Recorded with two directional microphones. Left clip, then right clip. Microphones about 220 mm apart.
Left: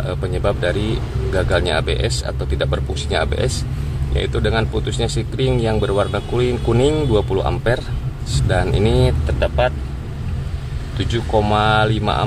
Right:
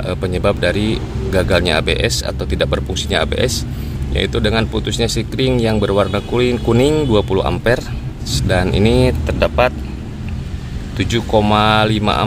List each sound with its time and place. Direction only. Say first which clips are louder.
0.0 s speech: right 4 dB; 30° right (ahead or behind)
11.0 s speech: right 3 dB; 30° right (ahead or behind)